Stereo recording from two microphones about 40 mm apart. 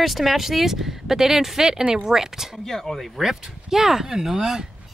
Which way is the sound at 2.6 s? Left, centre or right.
Centre.